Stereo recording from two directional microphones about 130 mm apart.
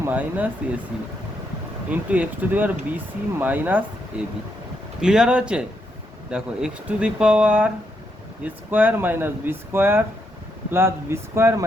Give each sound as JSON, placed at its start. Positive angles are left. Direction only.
{"t": 0.0, "sound": "speech", "side_deg": -10}
{"t": 1.9, "sound": "speech", "side_deg": -10}
{"t": 4.9, "sound": "a man's voice", "side_deg": -5}